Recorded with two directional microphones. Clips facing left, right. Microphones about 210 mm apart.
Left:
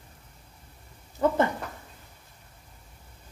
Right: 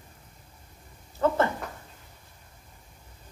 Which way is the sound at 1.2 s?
15° left (ahead or behind).